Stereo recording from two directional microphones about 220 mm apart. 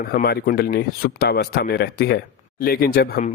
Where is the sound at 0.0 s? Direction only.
40° left (ahead or behind).